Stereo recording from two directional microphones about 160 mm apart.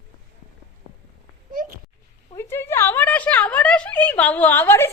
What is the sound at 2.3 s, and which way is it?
A woman's voice, 15° left (ahead or behind).